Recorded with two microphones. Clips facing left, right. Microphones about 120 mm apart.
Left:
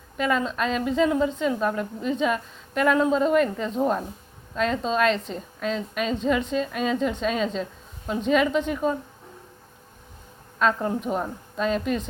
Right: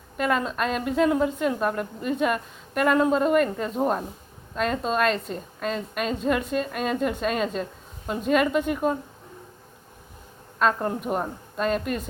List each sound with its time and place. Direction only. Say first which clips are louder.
0.2 s a woman's voice: even; centre (ahead or behind)
10.6 s a woman's voice: even; centre (ahead or behind)